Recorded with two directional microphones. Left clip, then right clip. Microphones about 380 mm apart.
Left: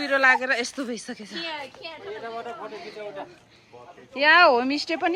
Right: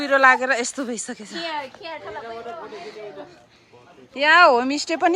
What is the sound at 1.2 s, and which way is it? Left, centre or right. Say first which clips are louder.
Speech: right 4 dB; right.